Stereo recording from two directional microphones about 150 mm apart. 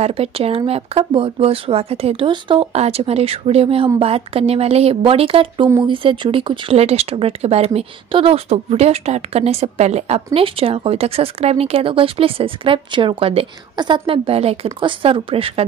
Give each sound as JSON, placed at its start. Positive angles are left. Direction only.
{"t": 0.0, "sound": "speech", "side_deg": -40}